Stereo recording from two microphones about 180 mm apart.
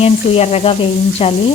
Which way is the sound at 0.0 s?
35° left (ahead or behind).